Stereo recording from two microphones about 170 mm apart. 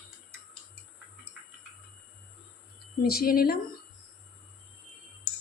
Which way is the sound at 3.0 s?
65° left (ahead or behind).